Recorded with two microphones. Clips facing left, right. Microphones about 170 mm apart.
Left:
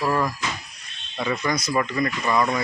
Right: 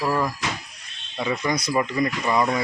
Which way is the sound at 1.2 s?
25° right (ahead or behind).